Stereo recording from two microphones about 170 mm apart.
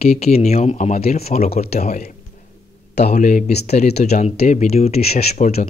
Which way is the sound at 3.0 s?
45° left (ahead or behind).